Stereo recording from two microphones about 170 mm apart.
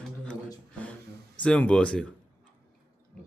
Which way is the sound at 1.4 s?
5° left (ahead or behind).